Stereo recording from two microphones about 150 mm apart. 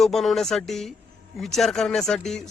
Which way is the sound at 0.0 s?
Centre (ahead or behind).